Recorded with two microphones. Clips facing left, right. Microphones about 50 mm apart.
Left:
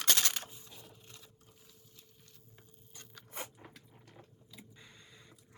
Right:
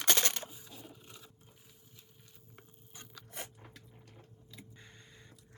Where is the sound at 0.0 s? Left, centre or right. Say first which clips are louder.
Right 1 dB; right.